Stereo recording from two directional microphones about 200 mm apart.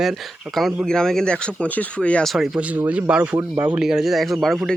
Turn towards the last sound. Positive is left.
turn(degrees=0)  # may be behind; listen again after turning